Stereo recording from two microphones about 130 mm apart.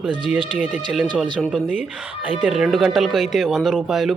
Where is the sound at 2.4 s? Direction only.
Centre (ahead or behind).